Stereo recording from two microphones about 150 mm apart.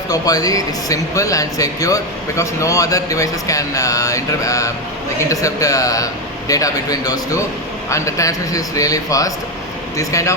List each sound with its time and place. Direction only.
0.1 s speech: 25° left (ahead or behind)